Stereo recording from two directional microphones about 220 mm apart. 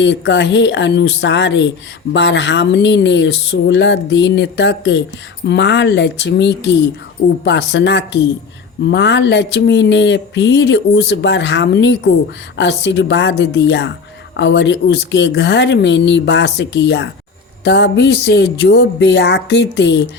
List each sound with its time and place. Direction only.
0.0 s speech: 55° left (ahead or behind)